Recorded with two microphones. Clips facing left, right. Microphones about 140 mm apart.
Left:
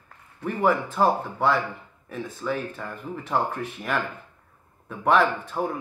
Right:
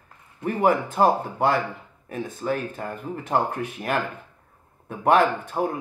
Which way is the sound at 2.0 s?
55° right (ahead or behind).